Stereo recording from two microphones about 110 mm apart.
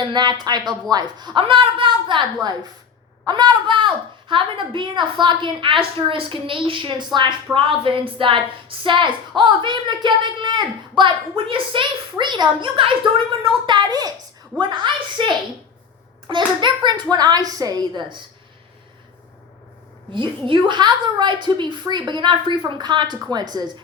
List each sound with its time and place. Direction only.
0.1 s a woman's voice: 40° right (ahead or behind)
20.5 s a woman's voice: 45° right (ahead or behind)